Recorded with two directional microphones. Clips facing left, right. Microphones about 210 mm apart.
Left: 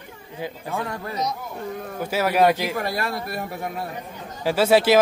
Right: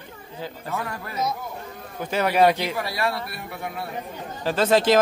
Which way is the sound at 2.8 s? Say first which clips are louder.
Even; 45° left (ahead or behind).